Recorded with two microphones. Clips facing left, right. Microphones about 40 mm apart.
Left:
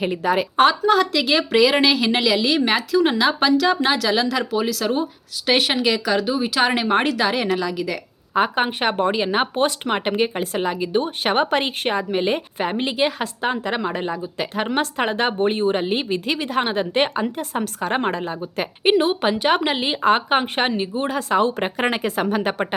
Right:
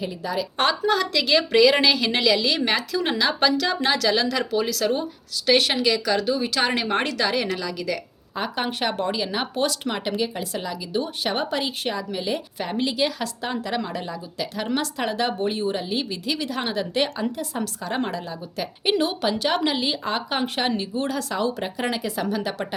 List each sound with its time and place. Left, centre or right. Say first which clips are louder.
0.0 s speech: left 7 dB; left
0.5 s a woman's voice: left 5 dB; centre
5.5 s speech: left 1 dB; left
6.1 s speech: left 3 dB; centre; by 20.4 s left
20.4 s speech: left 3 dB; left